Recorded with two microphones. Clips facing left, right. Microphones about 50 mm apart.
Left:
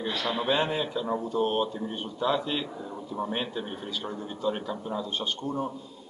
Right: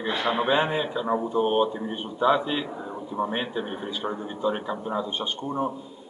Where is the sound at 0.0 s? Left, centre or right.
Right.